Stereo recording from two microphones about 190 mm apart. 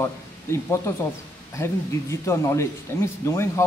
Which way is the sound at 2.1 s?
15° left (ahead or behind).